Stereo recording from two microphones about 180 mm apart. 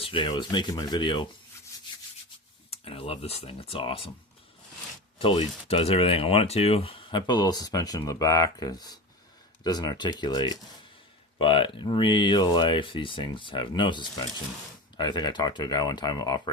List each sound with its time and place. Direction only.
0.0 s speech: 30° left (ahead or behind)
2.6 s speech: 30° left (ahead or behind)
5.2 s speech: 30° left (ahead or behind)